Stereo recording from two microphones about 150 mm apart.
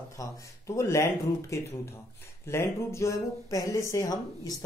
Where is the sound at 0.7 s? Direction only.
20° left (ahead or behind).